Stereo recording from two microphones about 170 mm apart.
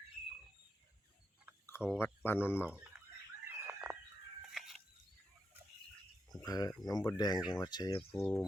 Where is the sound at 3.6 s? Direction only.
10° right (ahead or behind).